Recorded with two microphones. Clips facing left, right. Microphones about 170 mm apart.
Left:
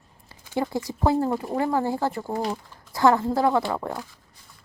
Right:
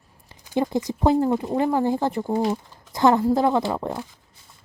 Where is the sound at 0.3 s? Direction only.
20° right (ahead or behind).